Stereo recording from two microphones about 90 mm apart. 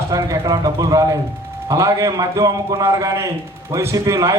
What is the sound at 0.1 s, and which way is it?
A man's voice, 40° right (ahead or behind).